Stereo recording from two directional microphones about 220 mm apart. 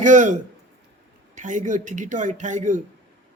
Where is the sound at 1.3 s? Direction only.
35° right (ahead or behind).